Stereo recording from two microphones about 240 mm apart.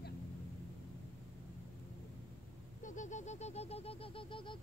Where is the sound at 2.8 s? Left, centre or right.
Left.